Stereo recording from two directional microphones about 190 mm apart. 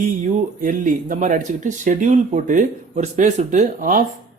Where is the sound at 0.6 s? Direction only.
45° right (ahead or behind).